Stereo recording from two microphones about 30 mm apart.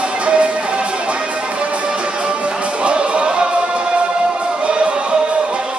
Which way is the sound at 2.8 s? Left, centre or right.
Right.